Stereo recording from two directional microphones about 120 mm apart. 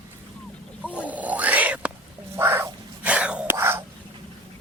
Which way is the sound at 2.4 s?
20° right (ahead or behind).